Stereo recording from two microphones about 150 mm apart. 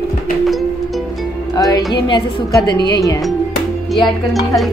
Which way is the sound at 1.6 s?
25° left (ahead or behind).